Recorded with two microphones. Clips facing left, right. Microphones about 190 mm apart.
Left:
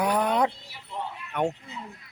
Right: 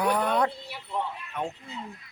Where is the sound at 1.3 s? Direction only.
70° left (ahead or behind).